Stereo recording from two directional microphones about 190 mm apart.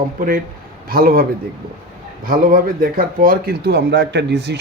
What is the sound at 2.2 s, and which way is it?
Speech, 45° right (ahead or behind).